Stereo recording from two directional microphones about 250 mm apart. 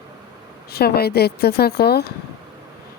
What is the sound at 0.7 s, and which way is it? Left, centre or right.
Speech, left.